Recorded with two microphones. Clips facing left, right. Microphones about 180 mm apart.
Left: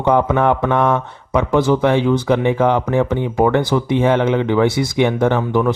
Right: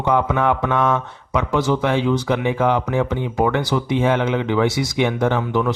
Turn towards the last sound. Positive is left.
turn(degrees=50)  # may be behind; listen again after turning